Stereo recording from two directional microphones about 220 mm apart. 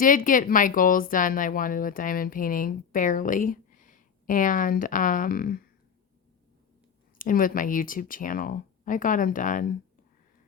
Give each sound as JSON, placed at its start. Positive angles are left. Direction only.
{"t": 0.0, "sound": "speech", "side_deg": 40}
{"t": 7.2, "sound": "speech", "side_deg": 40}